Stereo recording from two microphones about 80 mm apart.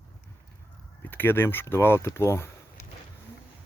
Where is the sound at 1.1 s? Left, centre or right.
Left.